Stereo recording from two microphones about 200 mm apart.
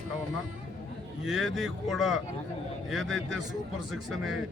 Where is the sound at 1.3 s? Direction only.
Centre (ahead or behind).